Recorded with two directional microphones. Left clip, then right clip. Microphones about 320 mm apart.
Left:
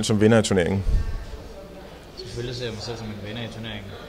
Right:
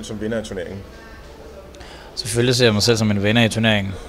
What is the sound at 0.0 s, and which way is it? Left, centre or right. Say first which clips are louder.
Speech: left 7 dB; left.